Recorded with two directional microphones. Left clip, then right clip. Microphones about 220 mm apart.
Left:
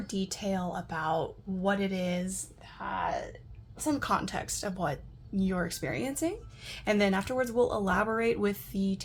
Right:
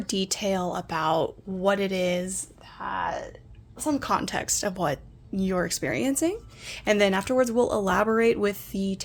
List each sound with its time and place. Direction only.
0.1 s a woman's voice: 40° right (ahead or behind)